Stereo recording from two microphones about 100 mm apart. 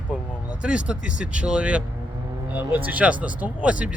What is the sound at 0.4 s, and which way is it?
Speech, 10° right (ahead or behind).